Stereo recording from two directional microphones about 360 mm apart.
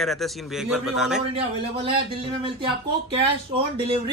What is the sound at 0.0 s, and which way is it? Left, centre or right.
A man's voice, centre.